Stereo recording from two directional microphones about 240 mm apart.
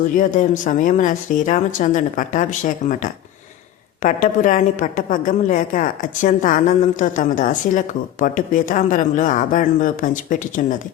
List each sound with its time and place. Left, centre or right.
0.2 s a woman's voice: left